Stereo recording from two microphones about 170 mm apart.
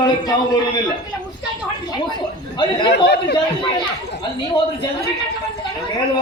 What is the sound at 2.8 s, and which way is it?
Speech, 80° left.